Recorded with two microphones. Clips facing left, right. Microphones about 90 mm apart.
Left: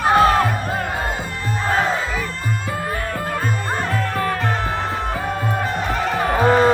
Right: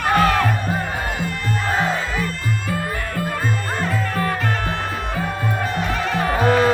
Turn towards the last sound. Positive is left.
turn(degrees=30)  # may be behind; listen again after turning